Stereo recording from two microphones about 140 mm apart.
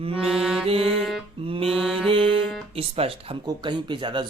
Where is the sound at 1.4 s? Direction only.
40° right (ahead or behind).